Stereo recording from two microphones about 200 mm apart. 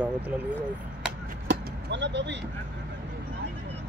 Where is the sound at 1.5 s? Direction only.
60° right (ahead or behind).